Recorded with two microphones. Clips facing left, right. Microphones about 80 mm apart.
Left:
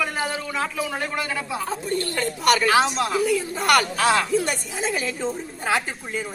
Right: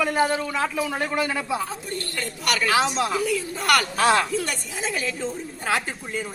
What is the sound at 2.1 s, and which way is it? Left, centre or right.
Speech, left.